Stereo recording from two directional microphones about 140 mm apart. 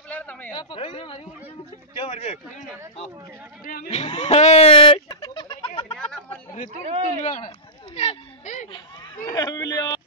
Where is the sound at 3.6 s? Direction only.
90° left.